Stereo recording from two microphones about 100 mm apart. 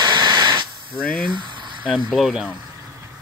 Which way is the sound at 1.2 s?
50° right (ahead or behind).